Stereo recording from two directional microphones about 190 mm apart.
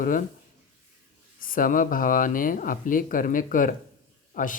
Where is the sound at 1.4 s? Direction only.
45° left (ahead or behind).